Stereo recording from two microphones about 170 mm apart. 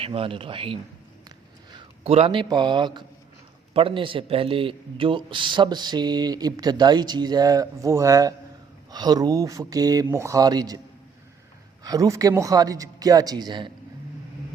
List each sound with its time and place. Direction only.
0.0 s a man's voice: 30° right (ahead or behind)
11.8 s a man's voice: 20° right (ahead or behind)